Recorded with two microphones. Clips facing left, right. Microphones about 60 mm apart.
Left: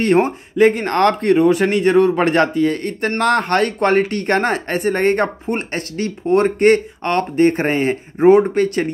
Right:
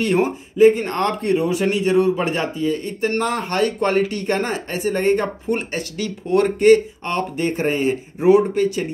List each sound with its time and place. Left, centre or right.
0.0 s speech: left
0.7 s a man's voice: left
6.6 s speech: left